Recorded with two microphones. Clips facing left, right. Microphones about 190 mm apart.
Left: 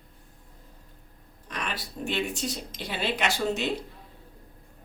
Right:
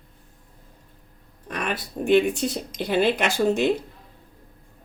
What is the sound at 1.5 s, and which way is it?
Speech, 55° right (ahead or behind).